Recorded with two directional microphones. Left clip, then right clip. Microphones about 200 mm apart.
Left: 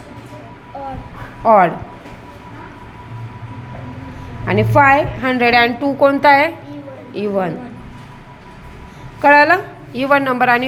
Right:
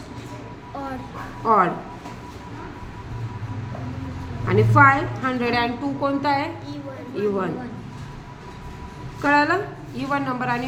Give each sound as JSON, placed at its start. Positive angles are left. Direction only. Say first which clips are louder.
{"t": 1.5, "sound": "a woman's voice", "louder": "left 7 dB", "side_deg": 35}
{"t": 4.4, "sound": "a woman's voice", "louder": "left 4 dB", "side_deg": 40}
{"t": 9.2, "sound": "a woman's voice", "louder": "left 9 dB", "side_deg": 40}